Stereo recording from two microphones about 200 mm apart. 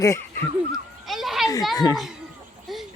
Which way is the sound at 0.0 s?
15° left (ahead or behind).